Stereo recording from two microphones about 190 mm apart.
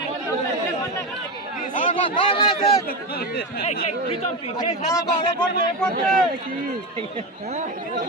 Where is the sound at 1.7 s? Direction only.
45° left (ahead or behind).